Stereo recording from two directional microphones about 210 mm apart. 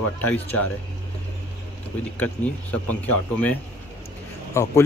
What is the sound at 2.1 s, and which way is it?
Speech, 5° left (ahead or behind).